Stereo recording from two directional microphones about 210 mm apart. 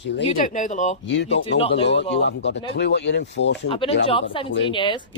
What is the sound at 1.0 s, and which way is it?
Speech, 55° left (ahead or behind).